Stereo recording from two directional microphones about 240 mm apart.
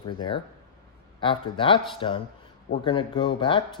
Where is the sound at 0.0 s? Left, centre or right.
Centre.